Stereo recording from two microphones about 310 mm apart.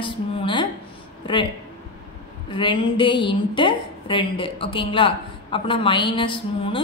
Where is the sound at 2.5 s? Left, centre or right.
Centre.